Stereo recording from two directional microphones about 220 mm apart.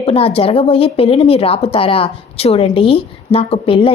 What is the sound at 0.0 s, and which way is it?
A woman's voice, 25° left (ahead or behind).